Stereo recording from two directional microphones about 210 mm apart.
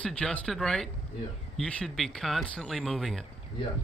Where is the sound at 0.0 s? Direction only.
5° left (ahead or behind).